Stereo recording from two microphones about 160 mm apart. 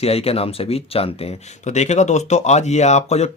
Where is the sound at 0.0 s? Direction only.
40° left (ahead or behind).